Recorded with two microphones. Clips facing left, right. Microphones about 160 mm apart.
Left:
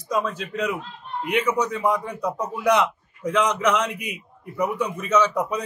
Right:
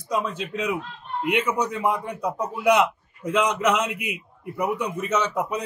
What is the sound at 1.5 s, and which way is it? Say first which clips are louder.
A man's voice: left 2 dB; 10° right (ahead or behind).